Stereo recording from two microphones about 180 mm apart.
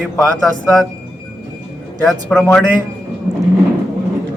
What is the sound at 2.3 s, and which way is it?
Speech, 5° left (ahead or behind).